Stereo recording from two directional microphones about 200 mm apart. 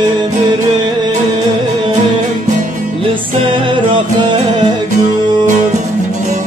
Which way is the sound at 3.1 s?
25° right (ahead or behind).